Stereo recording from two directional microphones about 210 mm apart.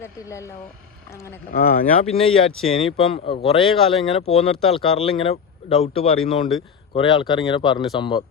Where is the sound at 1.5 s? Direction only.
40° left (ahead or behind); by 8.2 s 20° left (ahead or behind).